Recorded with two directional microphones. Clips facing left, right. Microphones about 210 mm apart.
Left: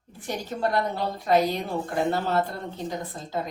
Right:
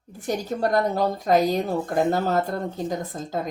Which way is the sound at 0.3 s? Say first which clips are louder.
Right 4 dB; 45° right (ahead or behind).